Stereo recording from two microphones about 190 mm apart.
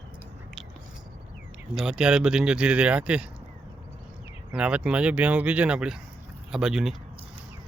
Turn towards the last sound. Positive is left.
turn(degrees=-5)  # may be behind; listen again after turning